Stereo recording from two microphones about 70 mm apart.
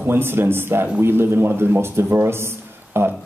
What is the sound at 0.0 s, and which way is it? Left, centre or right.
A man's voice, right.